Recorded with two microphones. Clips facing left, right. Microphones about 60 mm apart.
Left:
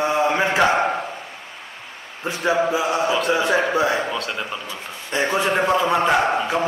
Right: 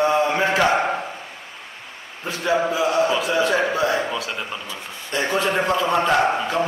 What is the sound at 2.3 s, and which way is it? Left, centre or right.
Speech, left.